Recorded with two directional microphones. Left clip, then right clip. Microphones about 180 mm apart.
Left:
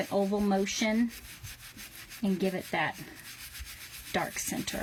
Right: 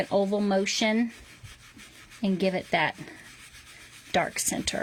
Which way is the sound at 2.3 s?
50° right (ahead or behind).